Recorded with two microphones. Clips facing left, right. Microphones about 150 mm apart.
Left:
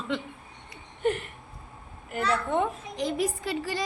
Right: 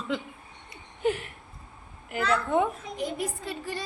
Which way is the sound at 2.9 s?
90° left.